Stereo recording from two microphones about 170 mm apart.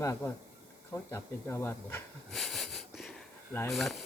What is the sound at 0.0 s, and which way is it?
Speech, 15° left (ahead or behind).